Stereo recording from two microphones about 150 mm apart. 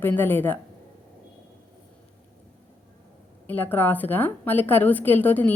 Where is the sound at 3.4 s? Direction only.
10° left (ahead or behind).